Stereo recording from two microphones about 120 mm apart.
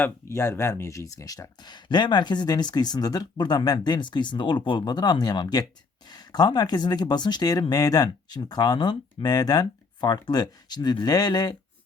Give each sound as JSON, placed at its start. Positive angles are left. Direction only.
{"t": 0.0, "sound": "speech", "side_deg": 20}